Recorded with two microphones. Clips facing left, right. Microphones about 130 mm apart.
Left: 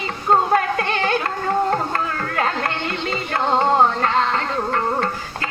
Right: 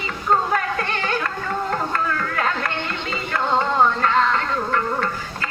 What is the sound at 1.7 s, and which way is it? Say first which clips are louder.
Music: left 1 dB; 40° left (ahead or behind).